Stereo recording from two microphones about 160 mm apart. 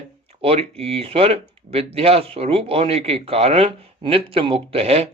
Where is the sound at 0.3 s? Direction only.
35° right (ahead or behind).